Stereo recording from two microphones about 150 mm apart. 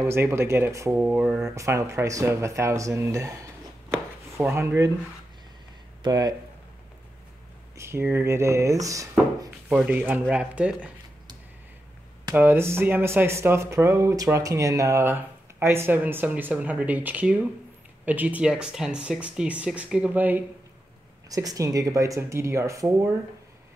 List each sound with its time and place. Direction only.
0.0 s speech: 15° right (ahead or behind)
3.9 s chopping: 15° right (ahead or behind)
6.0 s speech: 25° right (ahead or behind)
7.7 s speech: 15° right (ahead or behind)
9.7 s speech: 10° right (ahead or behind)
12.4 s speech: 15° right (ahead or behind)
21.3 s speech: 25° right (ahead or behind)